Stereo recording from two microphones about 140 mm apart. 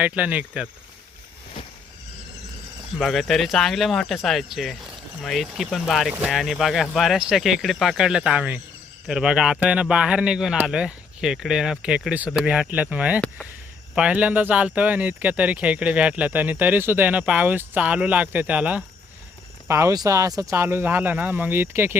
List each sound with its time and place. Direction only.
0.0 s speech: 10° right (ahead or behind)
3.0 s speech: centre (ahead or behind)
19.6 s speech: 20° right (ahead or behind)